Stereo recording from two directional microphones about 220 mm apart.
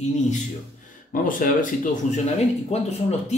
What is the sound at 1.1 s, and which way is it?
Speech, 40° left (ahead or behind).